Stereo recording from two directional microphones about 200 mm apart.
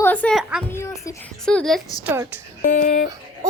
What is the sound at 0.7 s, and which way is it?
Speech, 15° left (ahead or behind).